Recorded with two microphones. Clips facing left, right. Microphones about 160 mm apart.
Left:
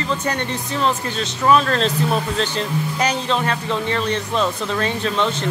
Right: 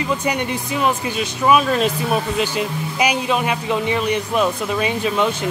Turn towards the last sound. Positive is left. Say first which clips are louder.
# right 1 dB
turn(degrees=-10)  # may be behind; listen again after turning